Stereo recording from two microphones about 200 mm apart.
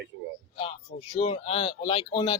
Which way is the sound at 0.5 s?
30° left (ahead or behind).